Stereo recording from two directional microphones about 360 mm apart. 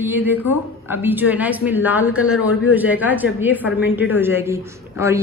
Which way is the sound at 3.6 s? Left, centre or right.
Left.